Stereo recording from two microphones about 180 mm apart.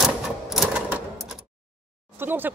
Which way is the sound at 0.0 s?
Centre (ahead or behind).